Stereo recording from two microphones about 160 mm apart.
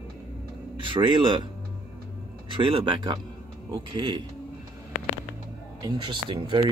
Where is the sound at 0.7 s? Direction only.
30° right (ahead or behind).